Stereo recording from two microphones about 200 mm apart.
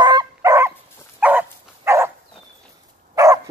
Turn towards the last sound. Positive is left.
turn(degrees=-15)  # may be behind; listen again after turning